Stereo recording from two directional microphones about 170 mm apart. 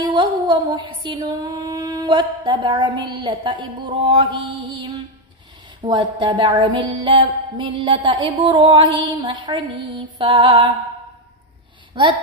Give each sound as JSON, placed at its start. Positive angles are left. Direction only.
{"t": 0.0, "sound": "a sound", "side_deg": -25}
{"t": 3.1, "sound": "music", "side_deg": -25}
{"t": 11.9, "sound": "music", "side_deg": -30}